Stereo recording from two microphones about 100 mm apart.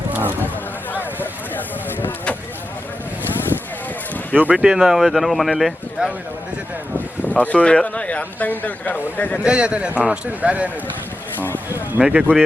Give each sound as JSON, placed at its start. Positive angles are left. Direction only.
{"t": 0.1, "sound": "a sound", "side_deg": -20}
{"t": 0.9, "sound": "a sound", "side_deg": 20}
{"t": 4.4, "sound": "speech", "side_deg": -10}
{"t": 7.3, "sound": "speech", "side_deg": 15}
{"t": 9.4, "sound": "speech", "side_deg": -10}
{"t": 11.9, "sound": "speech", "side_deg": -10}